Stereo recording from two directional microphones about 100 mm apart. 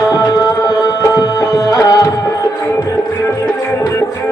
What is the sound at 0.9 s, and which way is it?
Music, 40° left (ahead or behind).